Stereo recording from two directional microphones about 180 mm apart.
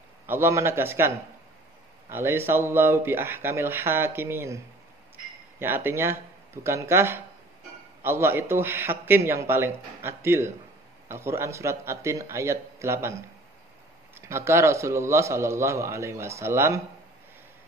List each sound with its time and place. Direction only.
0.3 s a man's voice: 15° right (ahead or behind)
5.6 s a man's voice: 15° right (ahead or behind)
14.1 s a man's voice: 15° right (ahead or behind)